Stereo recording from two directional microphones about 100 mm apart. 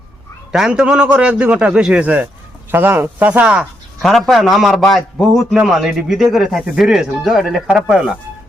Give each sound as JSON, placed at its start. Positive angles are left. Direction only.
{"t": 0.5, "sound": "a man's voice", "side_deg": -10}
{"t": 4.0, "sound": "a man's voice", "side_deg": 0}